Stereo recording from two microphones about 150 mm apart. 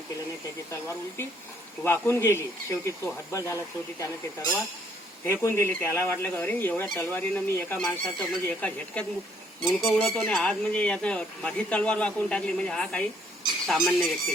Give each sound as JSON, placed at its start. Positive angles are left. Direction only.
{"t": 0.7, "sound": "speech", "side_deg": 15}
{"t": 5.2, "sound": "speech", "side_deg": 15}
{"t": 7.8, "sound": "speech", "side_deg": 5}